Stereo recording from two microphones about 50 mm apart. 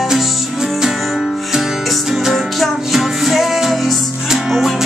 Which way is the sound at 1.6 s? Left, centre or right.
Centre.